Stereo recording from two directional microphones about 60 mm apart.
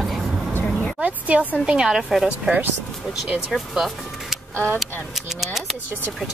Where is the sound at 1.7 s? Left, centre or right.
Centre.